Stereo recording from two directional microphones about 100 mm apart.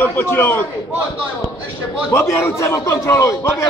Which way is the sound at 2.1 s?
25° left (ahead or behind).